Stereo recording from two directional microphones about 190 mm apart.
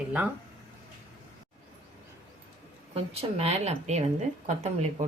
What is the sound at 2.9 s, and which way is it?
Speech, 30° right (ahead or behind).